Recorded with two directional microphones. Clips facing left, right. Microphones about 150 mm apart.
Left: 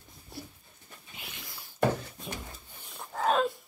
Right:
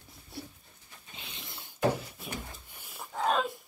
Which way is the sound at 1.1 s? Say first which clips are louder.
Even; 25° right (ahead or behind).